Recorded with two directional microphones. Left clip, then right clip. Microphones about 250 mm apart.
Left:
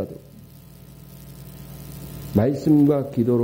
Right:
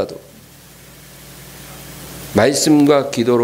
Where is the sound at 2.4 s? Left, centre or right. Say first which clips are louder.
Right 6 dB; centre.